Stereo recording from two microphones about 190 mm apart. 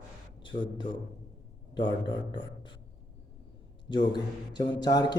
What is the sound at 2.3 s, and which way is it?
Speech, 25° left (ahead or behind).